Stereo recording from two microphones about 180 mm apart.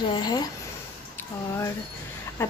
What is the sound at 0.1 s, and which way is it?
Speech, 20° left (ahead or behind).